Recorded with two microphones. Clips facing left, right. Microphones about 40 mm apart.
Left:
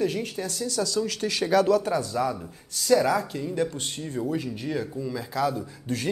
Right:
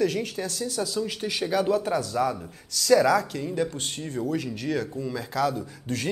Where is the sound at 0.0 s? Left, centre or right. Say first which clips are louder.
Right 1 dB; right.